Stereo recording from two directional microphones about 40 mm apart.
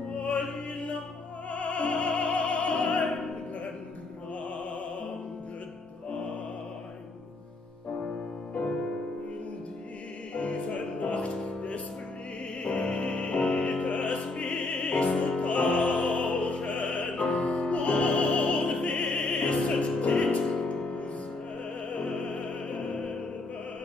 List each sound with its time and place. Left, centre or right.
0.2 s music: left
10.3 s music: left
12.6 s music: left
13.8 s music: left
15.4 s music: left
16.1 s music: centre
16.9 s music: left
19.4 s music: left
22.3 s opera: left